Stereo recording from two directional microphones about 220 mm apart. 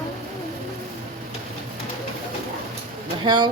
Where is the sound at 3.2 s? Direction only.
20° right (ahead or behind).